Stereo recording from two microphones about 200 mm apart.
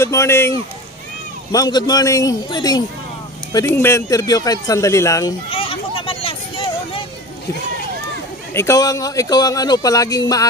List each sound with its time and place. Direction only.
0.0 s a man's voice: 15° left (ahead or behind)
5.5 s a sound: 25° left (ahead or behind)
8.5 s speech: 15° left (ahead or behind)